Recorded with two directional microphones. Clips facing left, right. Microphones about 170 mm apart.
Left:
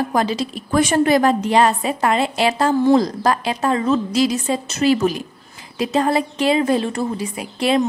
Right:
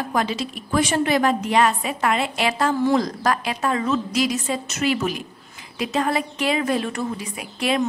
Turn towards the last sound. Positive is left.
turn(degrees=30)  # may be behind; listen again after turning